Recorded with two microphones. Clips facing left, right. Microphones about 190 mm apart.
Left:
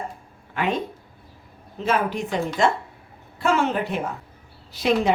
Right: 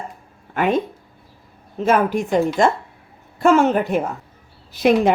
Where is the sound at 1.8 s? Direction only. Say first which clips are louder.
Right 6 dB; 50° right (ahead or behind).